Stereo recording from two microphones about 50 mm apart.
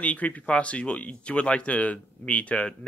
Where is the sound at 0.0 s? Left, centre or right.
Left.